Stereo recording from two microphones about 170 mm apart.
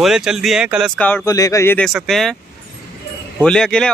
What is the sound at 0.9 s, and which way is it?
Speech, 10° left (ahead or behind).